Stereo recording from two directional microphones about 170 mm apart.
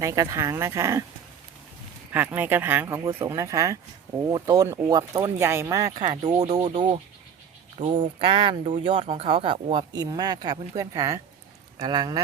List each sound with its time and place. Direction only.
0.0 s speech: 20° right (ahead or behind)
2.1 s speech: 10° right (ahead or behind)